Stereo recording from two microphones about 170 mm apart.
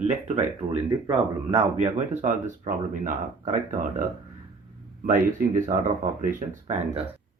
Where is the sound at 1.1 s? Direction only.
35° right (ahead or behind).